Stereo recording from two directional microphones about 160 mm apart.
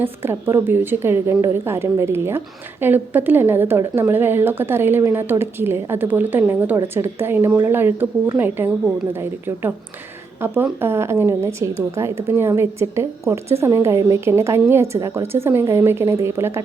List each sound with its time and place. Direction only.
0.0 s speech: 15° right (ahead or behind)